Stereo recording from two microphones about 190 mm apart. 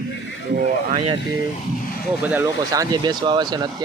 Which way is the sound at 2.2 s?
5° right (ahead or behind).